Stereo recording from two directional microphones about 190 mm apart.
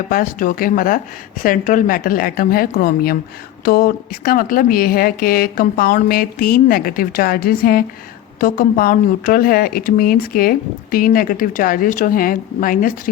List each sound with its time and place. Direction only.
0.1 s a woman's voice: 45° left (ahead or behind)